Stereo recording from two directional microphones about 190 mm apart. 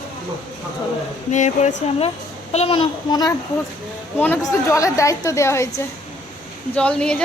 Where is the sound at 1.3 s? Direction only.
40° left (ahead or behind).